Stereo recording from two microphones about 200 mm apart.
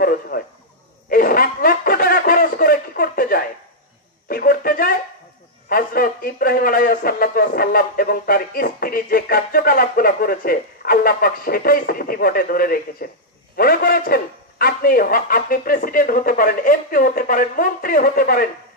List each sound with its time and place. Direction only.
0.0 s a sound: 50° left (ahead or behind)
4.3 s music: 45° left (ahead or behind)
5.7 s a man's voice: 45° left (ahead or behind)